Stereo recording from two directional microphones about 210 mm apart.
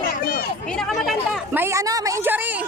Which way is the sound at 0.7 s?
Centre (ahead or behind).